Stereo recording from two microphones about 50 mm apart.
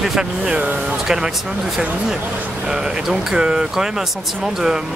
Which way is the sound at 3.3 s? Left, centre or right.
Centre.